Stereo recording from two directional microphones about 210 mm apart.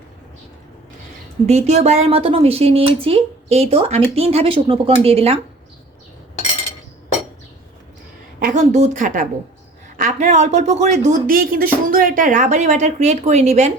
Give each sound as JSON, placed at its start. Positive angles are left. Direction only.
{"t": 1.5, "sound": "speech", "side_deg": -30}
{"t": 8.4, "sound": "speech", "side_deg": -35}